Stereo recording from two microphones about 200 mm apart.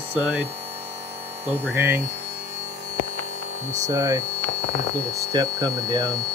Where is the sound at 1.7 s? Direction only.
10° right (ahead or behind).